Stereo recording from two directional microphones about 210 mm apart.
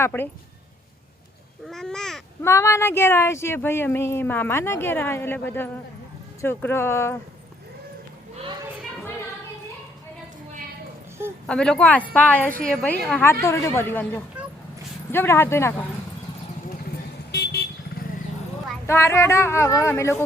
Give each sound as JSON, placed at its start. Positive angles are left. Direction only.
{"t": 0.0, "sound": "speech", "side_deg": 10}
{"t": 1.6, "sound": "speech", "side_deg": 0}
{"t": 2.4, "sound": "speech", "side_deg": 15}
{"t": 11.4, "sound": "speech", "side_deg": 5}
{"t": 17.3, "sound": "vehicle", "side_deg": 50}
{"t": 18.9, "sound": "speech", "side_deg": 10}